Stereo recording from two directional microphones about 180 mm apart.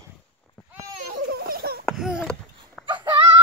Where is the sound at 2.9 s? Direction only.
25° right (ahead or behind).